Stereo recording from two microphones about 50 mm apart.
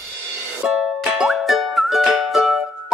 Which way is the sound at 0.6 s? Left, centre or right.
Centre.